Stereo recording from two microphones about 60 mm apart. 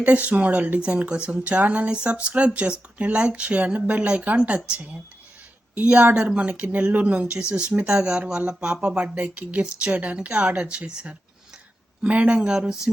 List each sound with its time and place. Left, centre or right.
0.0 s speech: right